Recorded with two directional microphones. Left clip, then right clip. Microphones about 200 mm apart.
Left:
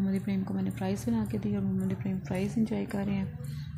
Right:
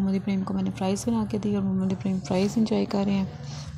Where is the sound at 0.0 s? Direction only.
15° right (ahead or behind).